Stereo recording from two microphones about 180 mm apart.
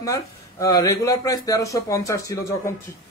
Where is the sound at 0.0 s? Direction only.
20° left (ahead or behind).